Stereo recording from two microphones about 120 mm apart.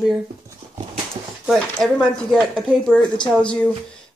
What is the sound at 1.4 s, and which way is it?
Speech, 5° right (ahead or behind).